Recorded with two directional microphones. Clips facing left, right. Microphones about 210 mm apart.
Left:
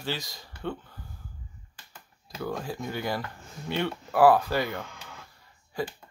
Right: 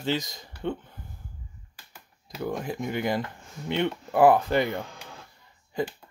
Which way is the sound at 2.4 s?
20° right (ahead or behind).